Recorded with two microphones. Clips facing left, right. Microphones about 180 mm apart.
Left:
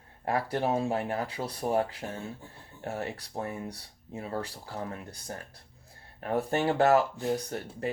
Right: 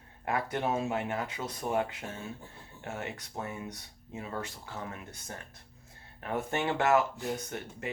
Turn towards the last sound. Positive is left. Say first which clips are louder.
# left 4 dB
turn(degrees=35)  # may be behind; listen again after turning